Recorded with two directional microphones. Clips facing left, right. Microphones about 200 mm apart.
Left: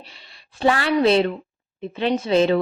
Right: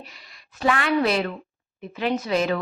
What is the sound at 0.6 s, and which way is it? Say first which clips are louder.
A woman's voice: left 4 dB; 30° left (ahead or behind).